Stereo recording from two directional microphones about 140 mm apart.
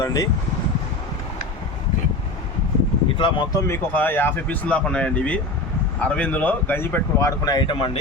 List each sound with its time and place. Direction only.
0.0 s speech: 25° left (ahead or behind)
3.2 s speech: 35° left (ahead or behind)
3.7 s speech: 15° left (ahead or behind); by 7.9 s 35° left (ahead or behind)